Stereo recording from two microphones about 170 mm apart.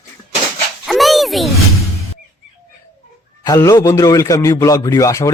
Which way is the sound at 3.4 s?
20° left (ahead or behind).